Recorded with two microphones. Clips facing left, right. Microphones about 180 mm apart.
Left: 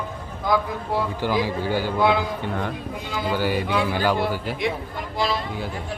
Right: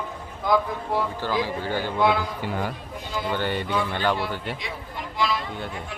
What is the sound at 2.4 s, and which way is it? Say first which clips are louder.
Speech: left 2 dB; 5° right (ahead or behind).